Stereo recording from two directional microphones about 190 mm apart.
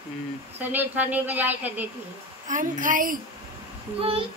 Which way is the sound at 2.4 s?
45° right (ahead or behind).